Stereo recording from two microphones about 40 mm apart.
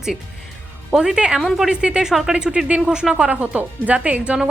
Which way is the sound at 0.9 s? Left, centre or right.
Centre.